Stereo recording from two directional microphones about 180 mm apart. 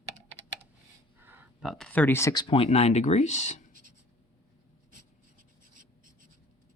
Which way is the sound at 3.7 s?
50° right (ahead or behind).